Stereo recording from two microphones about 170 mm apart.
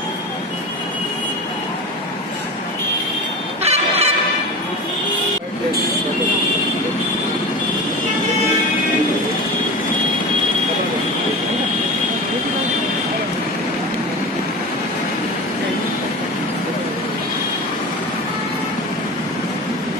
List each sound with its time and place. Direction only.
3.6 s fowl: 40° right (ahead or behind)